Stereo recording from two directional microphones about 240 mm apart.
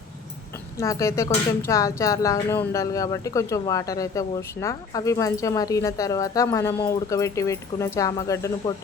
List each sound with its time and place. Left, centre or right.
0.8 s speech: centre